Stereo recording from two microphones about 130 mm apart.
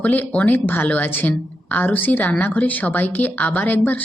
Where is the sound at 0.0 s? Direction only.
10° left (ahead or behind).